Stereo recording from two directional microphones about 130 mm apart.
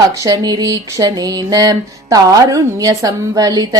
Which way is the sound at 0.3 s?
25° right (ahead or behind).